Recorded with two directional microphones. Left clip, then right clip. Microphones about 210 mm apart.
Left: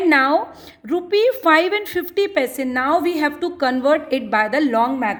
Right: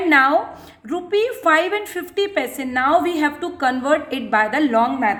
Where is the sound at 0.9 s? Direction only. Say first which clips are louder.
Left 3 dB; 35° left (ahead or behind).